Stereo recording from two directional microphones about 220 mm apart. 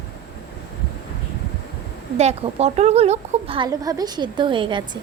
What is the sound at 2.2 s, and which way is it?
Speech, 30° right (ahead or behind).